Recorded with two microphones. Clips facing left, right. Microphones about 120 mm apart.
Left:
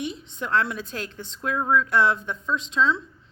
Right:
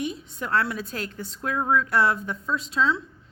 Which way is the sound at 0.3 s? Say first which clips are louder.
Left 2 dB; 10° right (ahead or behind).